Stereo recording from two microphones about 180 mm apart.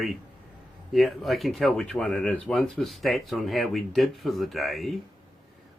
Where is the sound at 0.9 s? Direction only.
Centre (ahead or behind).